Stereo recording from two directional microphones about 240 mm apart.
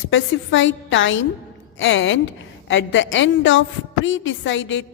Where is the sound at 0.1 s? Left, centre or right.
Left.